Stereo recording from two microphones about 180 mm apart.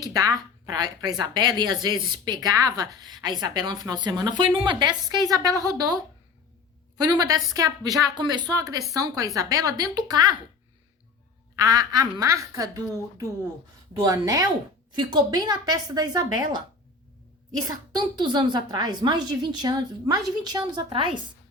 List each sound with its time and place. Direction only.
0.0 s a woman's voice: 20° right (ahead or behind)
11.5 s a woman's voice: 20° right (ahead or behind)
17.7 s a woman's voice: 25° right (ahead or behind)